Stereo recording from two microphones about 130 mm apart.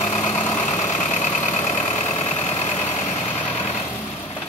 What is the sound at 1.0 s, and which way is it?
Vehicle, 65° left (ahead or behind).